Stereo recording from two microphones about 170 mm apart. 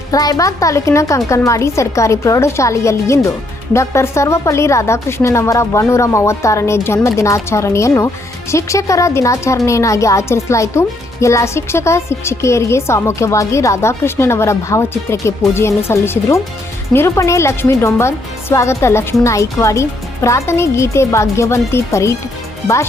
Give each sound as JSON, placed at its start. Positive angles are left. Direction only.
{"t": 0.1, "sound": "speech", "side_deg": 20}